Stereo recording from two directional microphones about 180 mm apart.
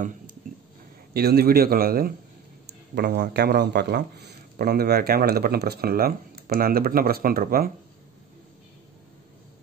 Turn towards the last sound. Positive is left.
turn(degrees=-55)  # may be behind; listen again after turning